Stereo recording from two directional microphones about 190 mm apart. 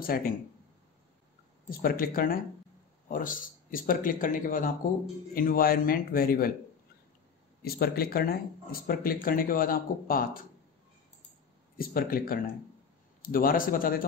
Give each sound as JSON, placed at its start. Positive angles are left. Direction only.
{"t": 0.0, "sound": "speech", "side_deg": 50}
{"t": 1.7, "sound": "speech", "side_deg": 50}
{"t": 7.6, "sound": "speech", "side_deg": 55}
{"t": 11.8, "sound": "speech", "side_deg": 50}